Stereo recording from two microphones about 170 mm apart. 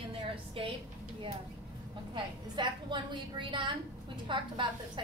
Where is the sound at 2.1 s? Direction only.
25° right (ahead or behind).